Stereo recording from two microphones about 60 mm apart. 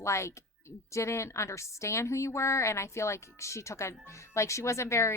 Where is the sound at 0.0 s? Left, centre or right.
Left.